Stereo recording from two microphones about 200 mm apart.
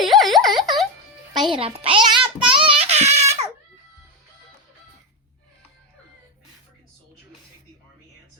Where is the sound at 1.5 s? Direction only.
25° right (ahead or behind).